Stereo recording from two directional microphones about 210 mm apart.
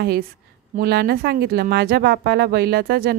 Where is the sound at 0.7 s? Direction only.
50° right (ahead or behind).